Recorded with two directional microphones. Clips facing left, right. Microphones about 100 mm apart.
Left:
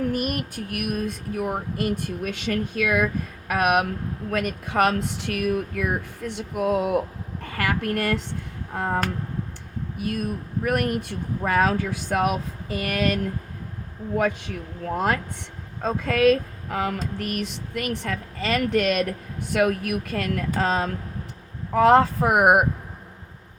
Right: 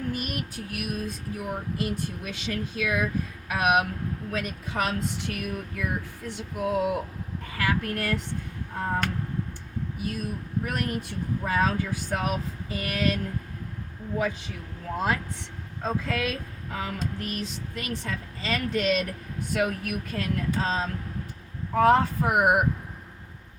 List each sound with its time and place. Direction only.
0.1 s speech: 50° left (ahead or behind)
10.0 s speech: 55° left (ahead or behind)
14.2 s speech: 60° left (ahead or behind)
21.8 s speech: 75° left (ahead or behind)